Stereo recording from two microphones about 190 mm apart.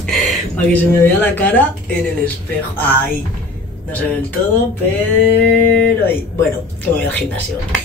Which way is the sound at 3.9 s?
10° left (ahead or behind).